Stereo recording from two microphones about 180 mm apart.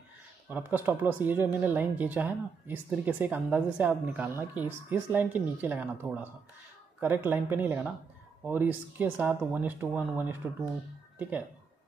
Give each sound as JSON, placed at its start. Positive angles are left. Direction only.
{"t": 0.5, "sound": "speech", "side_deg": -10}